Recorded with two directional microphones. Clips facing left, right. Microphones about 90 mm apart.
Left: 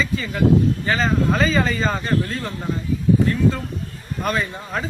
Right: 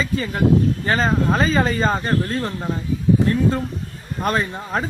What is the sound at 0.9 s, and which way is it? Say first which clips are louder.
Speech: right 1 dB; 40° right (ahead or behind).